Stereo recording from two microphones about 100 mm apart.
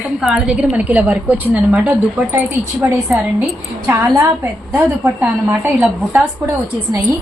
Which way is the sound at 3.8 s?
30° right (ahead or behind).